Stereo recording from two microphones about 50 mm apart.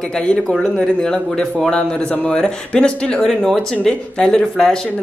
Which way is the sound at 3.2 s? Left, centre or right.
Centre.